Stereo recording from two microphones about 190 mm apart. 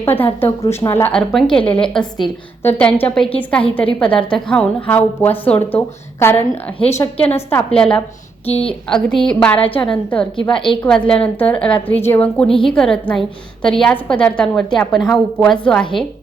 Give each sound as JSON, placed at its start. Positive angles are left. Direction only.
{"t": 0.0, "sound": "a woman's voice", "side_deg": 10}
{"t": 8.4, "sound": "a woman's voice", "side_deg": 30}
{"t": 8.9, "sound": "a woman's voice", "side_deg": 5}
{"t": 10.5, "sound": "a woman's voice", "side_deg": 25}
{"t": 10.8, "sound": "a woman's voice", "side_deg": 5}